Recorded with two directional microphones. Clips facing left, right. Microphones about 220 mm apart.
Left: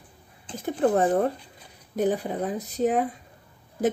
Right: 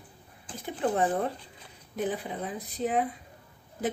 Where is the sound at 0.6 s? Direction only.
45° left (ahead or behind).